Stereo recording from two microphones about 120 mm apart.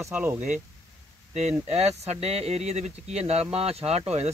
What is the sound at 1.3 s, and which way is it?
Speech, 70° right (ahead or behind).